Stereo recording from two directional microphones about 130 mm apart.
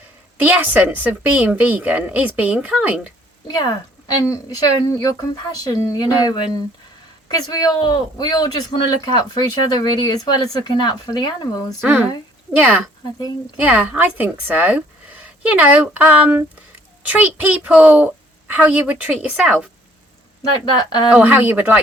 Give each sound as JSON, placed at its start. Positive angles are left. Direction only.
{"t": 0.4, "sound": "a woman's voice", "side_deg": -10}
{"t": 3.4, "sound": "a woman's voice", "side_deg": 30}
{"t": 12.5, "sound": "a woman's voice", "side_deg": -10}
{"t": 20.7, "sound": "speech", "side_deg": 35}
{"t": 21.1, "sound": "a woman's voice", "side_deg": -10}